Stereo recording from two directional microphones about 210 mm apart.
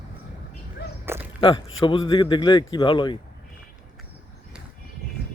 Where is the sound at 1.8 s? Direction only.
25° left (ahead or behind).